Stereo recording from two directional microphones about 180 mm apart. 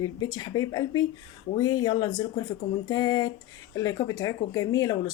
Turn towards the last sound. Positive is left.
turn(degrees=20)  # may be behind; listen again after turning